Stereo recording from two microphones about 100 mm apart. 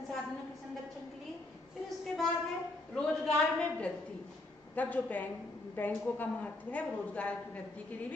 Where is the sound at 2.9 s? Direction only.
5° left (ahead or behind).